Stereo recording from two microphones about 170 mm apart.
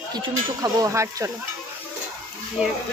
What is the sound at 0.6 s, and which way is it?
Speech, 20° right (ahead or behind).